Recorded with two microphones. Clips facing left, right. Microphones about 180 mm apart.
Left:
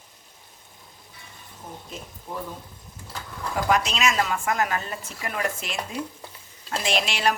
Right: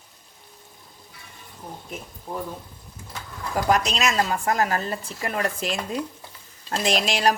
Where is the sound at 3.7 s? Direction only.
40° right (ahead or behind).